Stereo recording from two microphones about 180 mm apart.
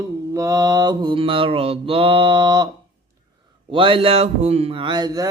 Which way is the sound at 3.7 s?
30° right (ahead or behind).